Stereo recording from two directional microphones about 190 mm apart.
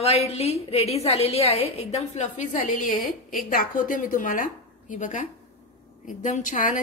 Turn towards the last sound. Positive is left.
turn(degrees=45)  # may be behind; listen again after turning